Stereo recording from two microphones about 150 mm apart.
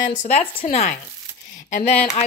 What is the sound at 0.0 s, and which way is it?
Speech, 50° left (ahead or behind).